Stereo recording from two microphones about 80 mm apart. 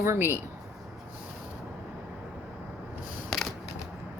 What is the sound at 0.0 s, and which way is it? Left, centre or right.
Speech, right.